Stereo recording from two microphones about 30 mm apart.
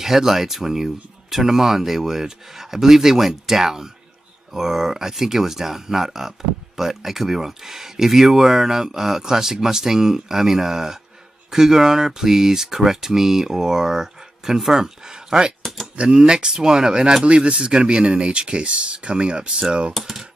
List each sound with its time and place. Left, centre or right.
0.0 s speech: centre
15.0 s a sound: right
16.0 s speech: right
17.2 s speech: right
19.9 s speech: centre